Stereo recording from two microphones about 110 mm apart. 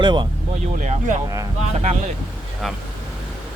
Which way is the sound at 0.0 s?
45° right (ahead or behind).